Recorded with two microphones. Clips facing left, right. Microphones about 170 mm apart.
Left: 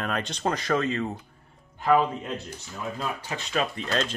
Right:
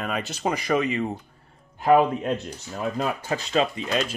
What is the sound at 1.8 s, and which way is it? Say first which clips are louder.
Speech: right 4 dB; 50° right (ahead or behind).